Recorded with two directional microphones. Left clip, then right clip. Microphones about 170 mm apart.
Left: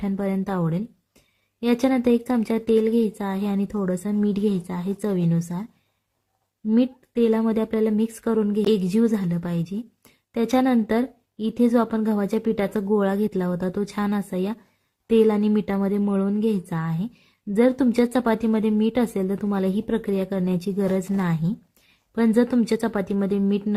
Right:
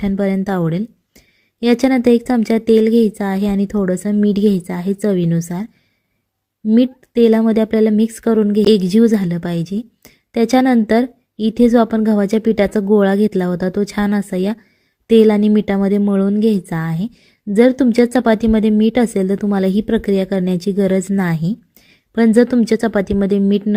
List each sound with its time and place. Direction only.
0.0 s a woman's voice: 25° right (ahead or behind)
6.7 s a woman's voice: 30° right (ahead or behind)